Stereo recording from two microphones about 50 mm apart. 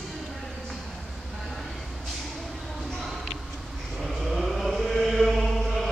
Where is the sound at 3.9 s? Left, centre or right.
Centre.